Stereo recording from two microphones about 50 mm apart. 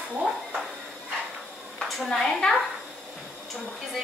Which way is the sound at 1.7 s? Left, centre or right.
Centre.